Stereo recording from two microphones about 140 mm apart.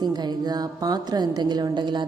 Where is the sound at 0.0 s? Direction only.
30° right (ahead or behind).